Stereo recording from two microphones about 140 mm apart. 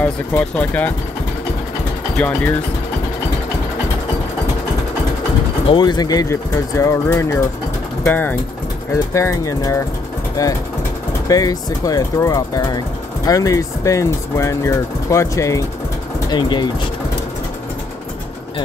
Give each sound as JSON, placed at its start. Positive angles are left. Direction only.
{"t": 0.0, "sound": "speech", "side_deg": 10}
{"t": 2.1, "sound": "speech", "side_deg": 10}
{"t": 5.7, "sound": "speech", "side_deg": 30}
{"t": 16.3, "sound": "speech", "side_deg": 30}